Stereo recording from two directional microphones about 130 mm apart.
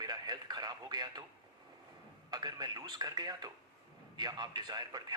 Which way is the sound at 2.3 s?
30° right (ahead or behind).